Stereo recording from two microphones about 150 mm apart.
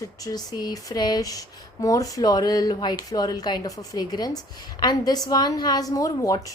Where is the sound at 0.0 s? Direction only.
25° left (ahead or behind).